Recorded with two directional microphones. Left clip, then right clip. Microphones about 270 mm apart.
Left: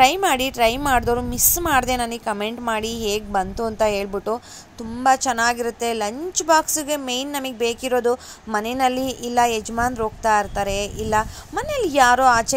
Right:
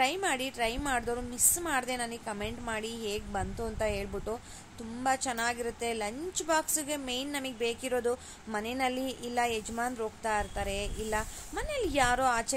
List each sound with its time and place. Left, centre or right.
0.0 s a woman's voice: left